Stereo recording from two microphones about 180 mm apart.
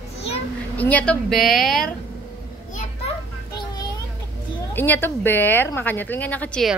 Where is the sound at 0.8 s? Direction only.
10° left (ahead or behind).